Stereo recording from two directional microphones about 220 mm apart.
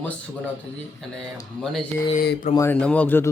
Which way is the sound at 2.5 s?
10° left (ahead or behind).